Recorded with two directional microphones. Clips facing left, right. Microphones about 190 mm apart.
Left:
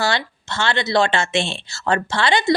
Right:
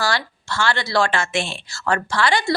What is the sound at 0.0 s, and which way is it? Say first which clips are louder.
Speech: left 2 dB; 25° left (ahead or behind).